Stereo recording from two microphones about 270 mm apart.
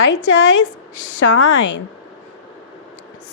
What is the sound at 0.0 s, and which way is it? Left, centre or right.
A woman's voice, left.